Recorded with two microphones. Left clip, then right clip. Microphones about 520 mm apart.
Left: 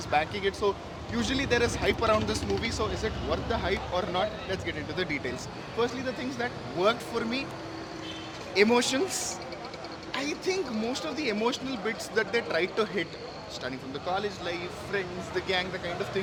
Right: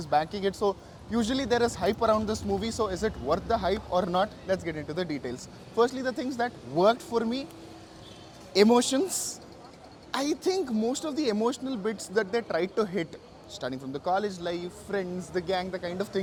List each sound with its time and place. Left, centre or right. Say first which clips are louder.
0.1 s speech: right 1 dB; right
4.1 s speech: right 3 dB; right
5.7 s speech: right 4 dB; right
8.5 s speech: right 2 dB; right
10.1 s speech: right 3 dB; right
14.2 s speech: right 2 dB; right
14.9 s speech: right 1 dB; right